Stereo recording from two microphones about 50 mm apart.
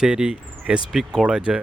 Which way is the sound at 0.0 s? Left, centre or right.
Right.